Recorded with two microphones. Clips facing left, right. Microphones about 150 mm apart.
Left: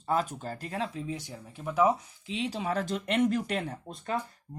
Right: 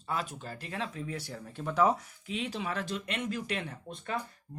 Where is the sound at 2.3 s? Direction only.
30° left (ahead or behind).